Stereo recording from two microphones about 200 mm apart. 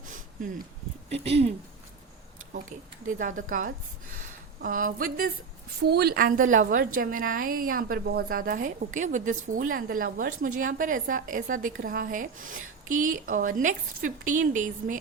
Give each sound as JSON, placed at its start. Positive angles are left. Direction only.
{"t": 1.1, "sound": "speech", "side_deg": -30}
{"t": 2.5, "sound": "a woman's voice", "side_deg": -40}